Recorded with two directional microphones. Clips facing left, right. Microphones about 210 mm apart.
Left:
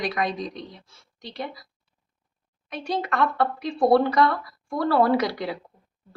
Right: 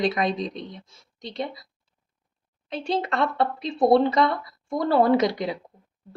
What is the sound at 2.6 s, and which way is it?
Speech, 25° right (ahead or behind).